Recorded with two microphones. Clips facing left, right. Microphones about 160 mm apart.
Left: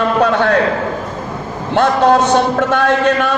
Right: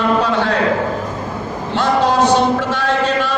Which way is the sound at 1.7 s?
55° left (ahead or behind).